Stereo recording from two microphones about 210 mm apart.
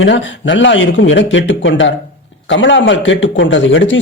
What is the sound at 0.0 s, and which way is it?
A man's voice, 60° left (ahead or behind).